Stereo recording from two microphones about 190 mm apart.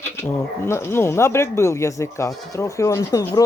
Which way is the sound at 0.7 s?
15° left (ahead or behind).